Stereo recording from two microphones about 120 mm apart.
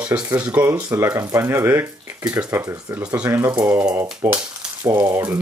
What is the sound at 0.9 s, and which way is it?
Speech, 25° right (ahead or behind).